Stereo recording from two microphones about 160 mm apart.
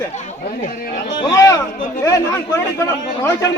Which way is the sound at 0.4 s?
60° left (ahead or behind).